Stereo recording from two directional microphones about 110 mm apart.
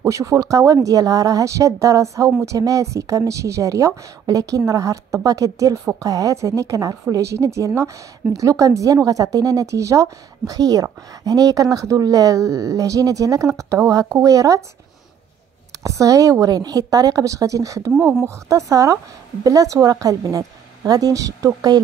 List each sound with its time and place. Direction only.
0.0 s a woman's voice: 30° right (ahead or behind)
15.8 s a woman's voice: 30° right (ahead or behind)